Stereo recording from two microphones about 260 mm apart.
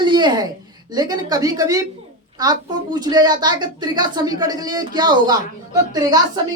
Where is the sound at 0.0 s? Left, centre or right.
Centre.